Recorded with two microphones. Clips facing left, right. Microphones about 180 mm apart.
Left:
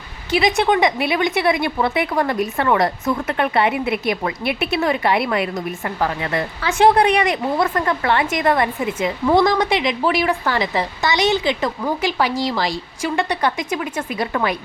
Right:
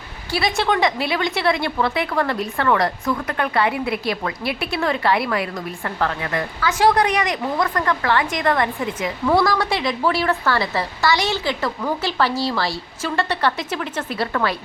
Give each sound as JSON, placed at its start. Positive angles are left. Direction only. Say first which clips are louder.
{"t": 0.3, "sound": "a woman's voice", "louder": "left 4 dB", "side_deg": 20}